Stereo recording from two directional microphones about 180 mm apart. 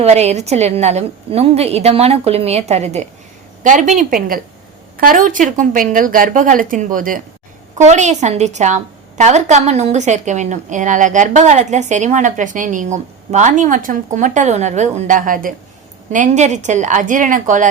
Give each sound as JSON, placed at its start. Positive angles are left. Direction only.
{"t": 0.0, "sound": "a woman's voice", "side_deg": -35}